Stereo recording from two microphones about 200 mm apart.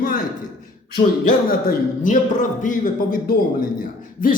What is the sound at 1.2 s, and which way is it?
Speech, 40° left (ahead or behind).